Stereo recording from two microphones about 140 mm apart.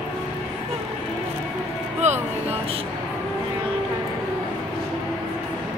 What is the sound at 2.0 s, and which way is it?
Music, 55° right (ahead or behind).